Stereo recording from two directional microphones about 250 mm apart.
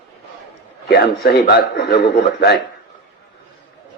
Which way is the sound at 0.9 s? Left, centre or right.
Left.